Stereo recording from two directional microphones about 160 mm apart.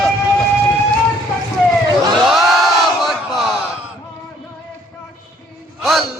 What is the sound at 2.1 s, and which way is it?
Crowd, centre (ahead or behind).